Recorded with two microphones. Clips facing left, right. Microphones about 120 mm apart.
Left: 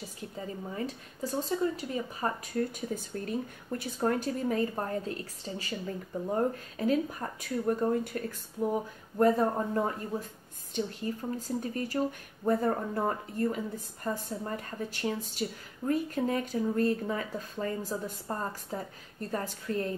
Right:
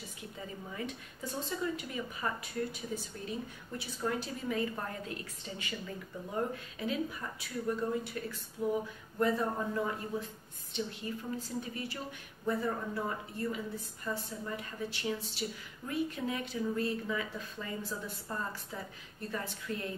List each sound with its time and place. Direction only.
0.7 s speech: 35° left (ahead or behind)